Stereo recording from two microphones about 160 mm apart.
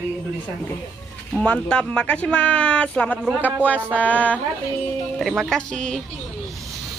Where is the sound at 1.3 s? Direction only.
10° left (ahead or behind).